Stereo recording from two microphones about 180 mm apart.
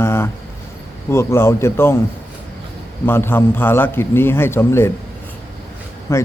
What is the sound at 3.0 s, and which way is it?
A man's voice, 10° left (ahead or behind).